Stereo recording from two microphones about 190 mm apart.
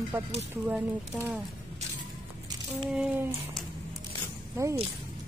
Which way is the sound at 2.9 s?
5° right (ahead or behind).